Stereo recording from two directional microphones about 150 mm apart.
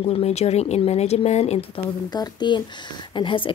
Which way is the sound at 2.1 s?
30° left (ahead or behind).